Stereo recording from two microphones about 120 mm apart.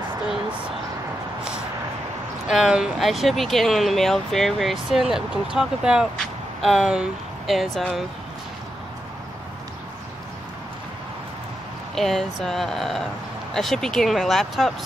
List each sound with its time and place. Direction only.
2.4 s speech: 5° right (ahead or behind)
11.9 s speech: 5° left (ahead or behind)